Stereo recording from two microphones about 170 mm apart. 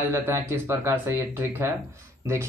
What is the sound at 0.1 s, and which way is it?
Speech, 15° right (ahead or behind).